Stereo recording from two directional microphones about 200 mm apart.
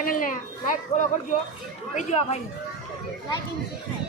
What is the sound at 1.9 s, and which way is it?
Speech, 30° left (ahead or behind).